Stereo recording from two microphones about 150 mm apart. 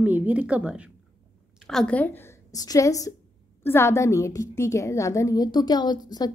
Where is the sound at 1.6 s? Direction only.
5° left (ahead or behind).